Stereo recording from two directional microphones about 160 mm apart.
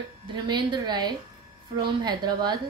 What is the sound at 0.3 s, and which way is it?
A woman's voice, 30° right (ahead or behind).